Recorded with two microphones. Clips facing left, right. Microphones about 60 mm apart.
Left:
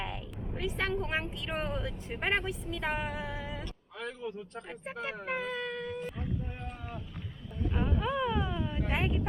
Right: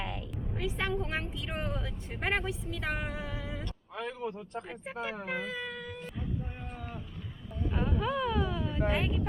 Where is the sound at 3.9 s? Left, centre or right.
Right.